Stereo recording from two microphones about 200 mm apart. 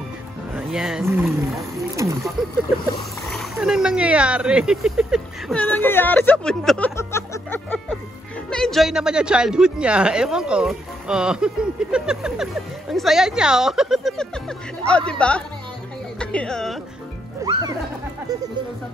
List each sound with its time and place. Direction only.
0.6 s speech: 5° right (ahead or behind)
2.0 s speech: 15° right (ahead or behind)
3.3 s a woman's voice: centre (ahead or behind)
5.6 s speech: 10° left (ahead or behind)
7.0 s music: 15° left (ahead or behind)
8.5 s a woman's voice: centre (ahead or behind)
17.5 s speech: 20° right (ahead or behind)